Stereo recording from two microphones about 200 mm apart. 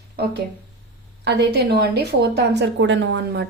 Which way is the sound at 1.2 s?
55° right (ahead or behind).